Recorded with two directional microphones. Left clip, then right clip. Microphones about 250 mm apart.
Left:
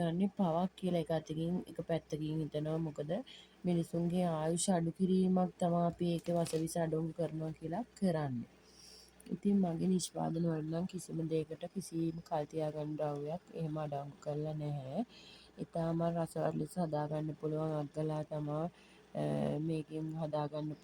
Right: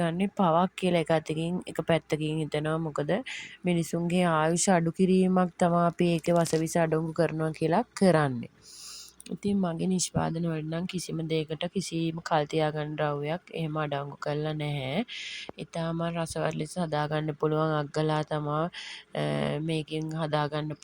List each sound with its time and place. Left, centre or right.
0.0 s speech: right
9.4 s speech: right